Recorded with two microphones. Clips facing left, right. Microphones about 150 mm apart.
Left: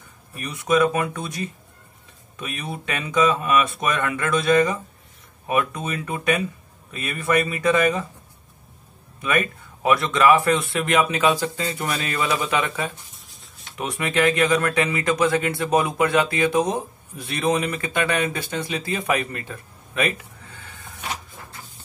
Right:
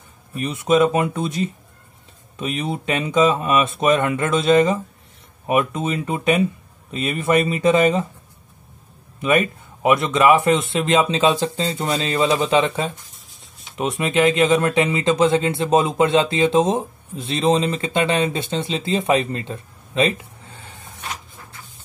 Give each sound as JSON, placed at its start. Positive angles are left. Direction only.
{"t": 0.3, "sound": "speech", "side_deg": -25}
{"t": 9.2, "sound": "speech", "side_deg": -20}